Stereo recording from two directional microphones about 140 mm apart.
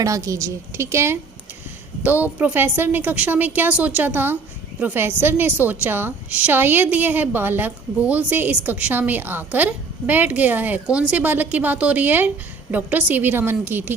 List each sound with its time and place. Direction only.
0.0 s a woman's voice: 25° right (ahead or behind)